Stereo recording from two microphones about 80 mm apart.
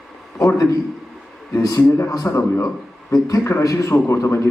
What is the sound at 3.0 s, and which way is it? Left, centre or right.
A man's voice, left.